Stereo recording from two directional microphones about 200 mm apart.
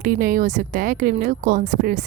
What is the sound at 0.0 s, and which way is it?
A woman's voice, 45° right (ahead or behind).